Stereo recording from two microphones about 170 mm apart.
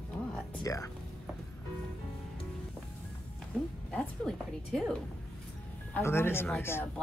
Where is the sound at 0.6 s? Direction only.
20° left (ahead or behind).